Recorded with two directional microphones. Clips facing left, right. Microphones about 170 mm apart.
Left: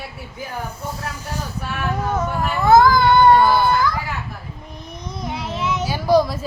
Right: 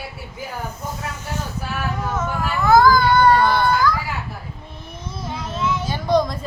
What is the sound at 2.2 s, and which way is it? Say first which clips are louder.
Baby cry: left 2 dB; 25° left (ahead or behind).